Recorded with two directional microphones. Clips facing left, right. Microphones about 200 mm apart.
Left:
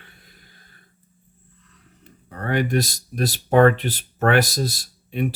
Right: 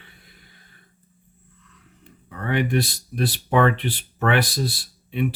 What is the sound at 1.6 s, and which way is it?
Speech, 40° left (ahead or behind).